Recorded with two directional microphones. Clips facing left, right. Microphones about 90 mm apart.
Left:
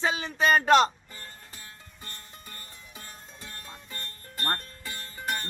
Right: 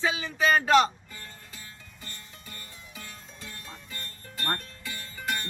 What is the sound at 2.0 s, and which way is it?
Music, 40° left (ahead or behind).